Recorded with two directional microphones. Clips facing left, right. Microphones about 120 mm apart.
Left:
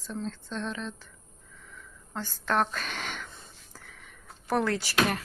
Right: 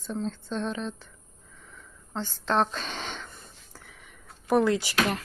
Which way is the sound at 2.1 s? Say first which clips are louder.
Right 2 dB; 20° right (ahead or behind).